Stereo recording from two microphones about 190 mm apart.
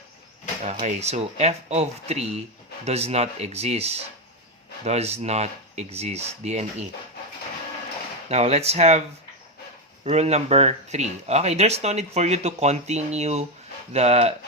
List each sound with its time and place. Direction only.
0.6 s speech: 40° right (ahead or behind)
8.3 s speech: 35° right (ahead or behind)